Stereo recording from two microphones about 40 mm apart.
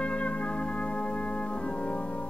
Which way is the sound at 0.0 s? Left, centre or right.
Left.